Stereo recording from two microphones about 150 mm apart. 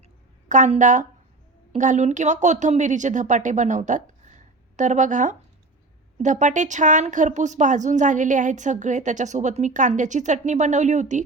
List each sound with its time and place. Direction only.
0.4 s speech: 55° right (ahead or behind)